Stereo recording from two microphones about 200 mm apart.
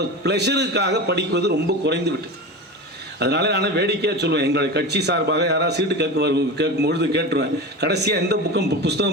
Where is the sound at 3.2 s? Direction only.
55° right (ahead or behind).